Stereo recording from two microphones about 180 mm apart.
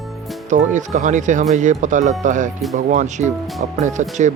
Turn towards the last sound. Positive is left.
turn(degrees=-40)  # may be behind; listen again after turning